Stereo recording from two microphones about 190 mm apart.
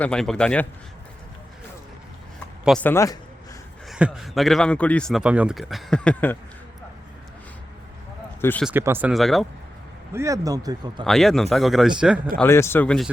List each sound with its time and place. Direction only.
0.0 s a man's voice: 5° left (ahead or behind)
2.6 s a man's voice: 5° left (ahead or behind)
3.8 s a man's voice: 5° right (ahead or behind)
8.4 s speech: 10° left (ahead or behind)
8.6 s a man's voice: 10° right (ahead or behind)
10.1 s speech: 15° right (ahead or behind)
11.0 s a man's voice: centre (ahead or behind)
12.4 s a man's voice: 15° left (ahead or behind)